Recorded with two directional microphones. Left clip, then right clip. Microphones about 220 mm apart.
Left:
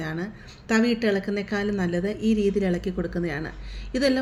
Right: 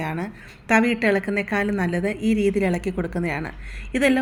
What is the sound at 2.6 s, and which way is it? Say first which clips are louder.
Speech: right 3 dB; 15° right (ahead or behind).